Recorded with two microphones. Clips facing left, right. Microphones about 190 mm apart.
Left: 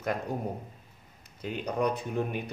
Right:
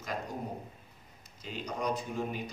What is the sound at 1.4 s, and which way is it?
Speech, 60° left (ahead or behind).